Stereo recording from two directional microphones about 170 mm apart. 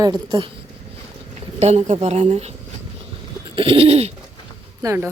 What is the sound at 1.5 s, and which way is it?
Speech, 40° right (ahead or behind).